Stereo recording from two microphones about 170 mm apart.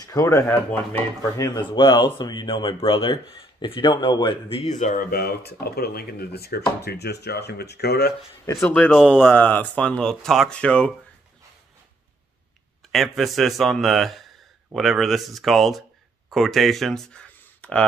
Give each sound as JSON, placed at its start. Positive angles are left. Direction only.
{"t": 0.0, "sound": "speech", "side_deg": 20}
{"t": 1.8, "sound": "speech", "side_deg": 25}
{"t": 8.6, "sound": "speech", "side_deg": 10}
{"t": 9.0, "sound": "a man's voice", "side_deg": -5}
{"t": 9.3, "sound": "speech", "side_deg": 10}
{"t": 12.9, "sound": "a man's voice", "side_deg": 0}